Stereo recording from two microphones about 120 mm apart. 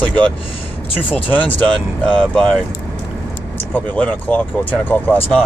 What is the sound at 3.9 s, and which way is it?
Speech, 10° left (ahead or behind).